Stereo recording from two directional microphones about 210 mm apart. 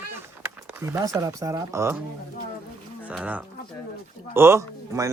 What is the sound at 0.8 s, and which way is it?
Speech, 15° right (ahead or behind).